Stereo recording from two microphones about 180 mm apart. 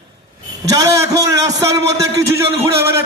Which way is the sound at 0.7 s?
20° right (ahead or behind).